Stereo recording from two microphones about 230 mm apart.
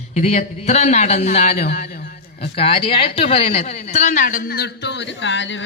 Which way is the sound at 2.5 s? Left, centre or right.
Left.